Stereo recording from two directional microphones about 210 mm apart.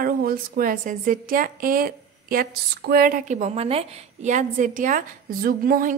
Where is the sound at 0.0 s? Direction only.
45° right (ahead or behind).